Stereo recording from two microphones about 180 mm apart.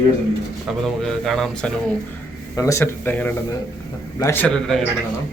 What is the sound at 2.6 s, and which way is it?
Speech, 15° left (ahead or behind).